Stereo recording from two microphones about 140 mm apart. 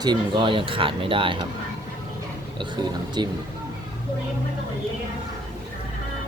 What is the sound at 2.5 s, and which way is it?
Speech, 30° right (ahead or behind).